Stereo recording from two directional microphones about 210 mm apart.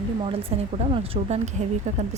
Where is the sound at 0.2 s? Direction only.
25° right (ahead or behind).